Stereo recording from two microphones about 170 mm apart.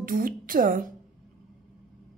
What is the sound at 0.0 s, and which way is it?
Speech, 55° right (ahead or behind).